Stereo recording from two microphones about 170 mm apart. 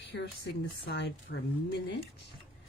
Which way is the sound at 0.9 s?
80° left.